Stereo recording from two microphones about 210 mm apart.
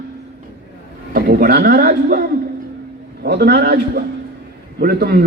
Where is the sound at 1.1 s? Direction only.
45° right (ahead or behind).